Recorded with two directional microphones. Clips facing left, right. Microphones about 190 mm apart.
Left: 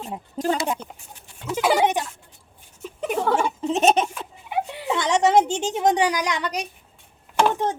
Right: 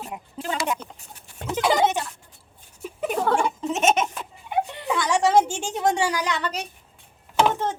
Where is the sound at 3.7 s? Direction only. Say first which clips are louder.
Left 3 dB; 35° left (ahead or behind).